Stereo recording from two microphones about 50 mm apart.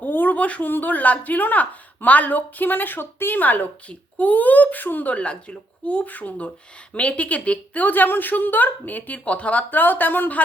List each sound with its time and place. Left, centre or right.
0.0 s a sound: left
0.7 s a woman's voice: left
5.1 s a woman's voice: left